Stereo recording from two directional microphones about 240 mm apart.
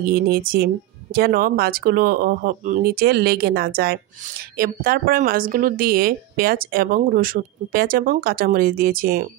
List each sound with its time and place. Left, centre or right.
0.0 s speech: right